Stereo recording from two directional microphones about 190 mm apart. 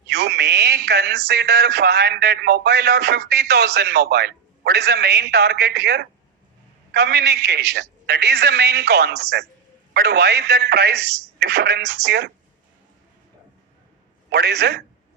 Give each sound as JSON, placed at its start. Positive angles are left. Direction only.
{"t": 0.1, "sound": "speech", "side_deg": -60}
{"t": 14.3, "sound": "a man's voice", "side_deg": -60}